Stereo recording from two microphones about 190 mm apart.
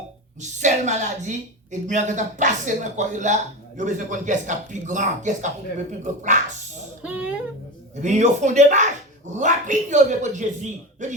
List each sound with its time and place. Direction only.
0.3 s speech: 40° right (ahead or behind)
7.0 s a sound: 5° right (ahead or behind)
8.0 s speech: 40° right (ahead or behind)